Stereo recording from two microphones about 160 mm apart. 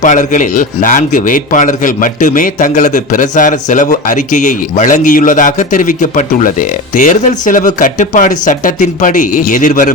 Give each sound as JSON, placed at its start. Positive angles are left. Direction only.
{"t": 0.0, "sound": "a man's voice", "side_deg": 50}